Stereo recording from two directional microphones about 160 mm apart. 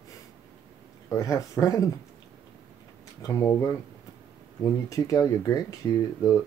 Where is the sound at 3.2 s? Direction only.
20° left (ahead or behind).